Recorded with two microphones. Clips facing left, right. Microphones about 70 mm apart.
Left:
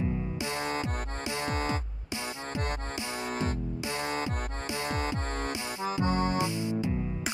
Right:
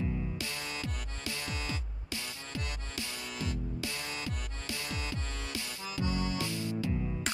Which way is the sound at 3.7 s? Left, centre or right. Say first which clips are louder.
Left 6 dB; left.